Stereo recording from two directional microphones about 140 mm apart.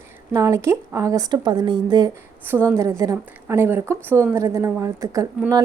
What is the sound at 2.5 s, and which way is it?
Speech, 20° right (ahead or behind).